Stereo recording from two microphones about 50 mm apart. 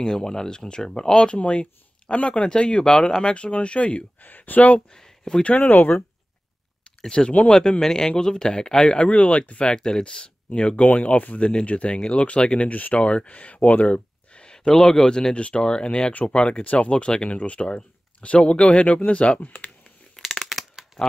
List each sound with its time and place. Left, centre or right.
0.0 s speech: centre
4.2 s speech: left
4.9 s speech: centre
5.6 s speech: left
7.0 s speech: centre
16.9 s speech: centre
19.4 s speech: left
20.4 s shuffling cards: centre